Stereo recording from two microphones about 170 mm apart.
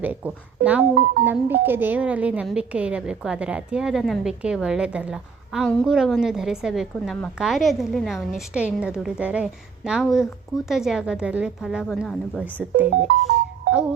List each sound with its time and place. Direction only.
0.0 s a woman's voice: 10° right (ahead or behind)
12.9 s music: 65° right (ahead or behind)